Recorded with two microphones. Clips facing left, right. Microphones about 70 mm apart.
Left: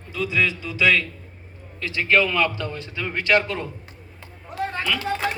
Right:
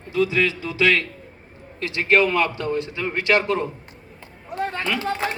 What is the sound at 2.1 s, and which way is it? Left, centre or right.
Speech, right.